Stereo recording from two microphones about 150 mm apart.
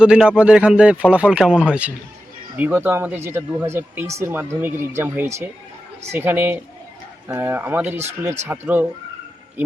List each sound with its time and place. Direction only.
0.0 s speech: 5° right (ahead or behind)